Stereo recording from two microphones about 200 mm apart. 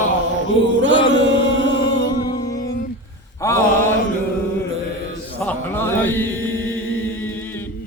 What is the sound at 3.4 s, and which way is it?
Speech, 15° left (ahead or behind).